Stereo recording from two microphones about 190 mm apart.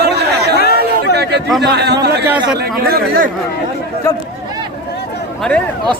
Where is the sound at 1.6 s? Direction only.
60° right (ahead or behind).